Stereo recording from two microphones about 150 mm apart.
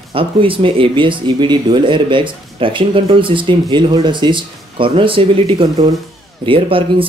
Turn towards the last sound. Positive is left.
turn(degrees=-35)  # may be behind; listen again after turning